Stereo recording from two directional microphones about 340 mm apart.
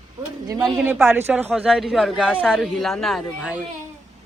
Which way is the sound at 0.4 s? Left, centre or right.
Centre.